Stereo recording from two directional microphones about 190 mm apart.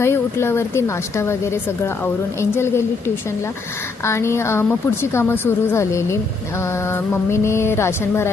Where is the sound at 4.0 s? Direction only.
15° left (ahead or behind).